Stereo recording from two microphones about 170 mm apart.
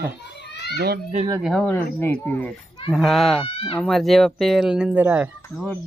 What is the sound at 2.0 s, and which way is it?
Speech, 10° left (ahead or behind).